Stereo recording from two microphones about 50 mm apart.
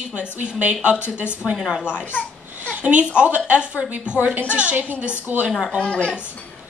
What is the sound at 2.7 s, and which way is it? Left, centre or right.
A woman's voice, right.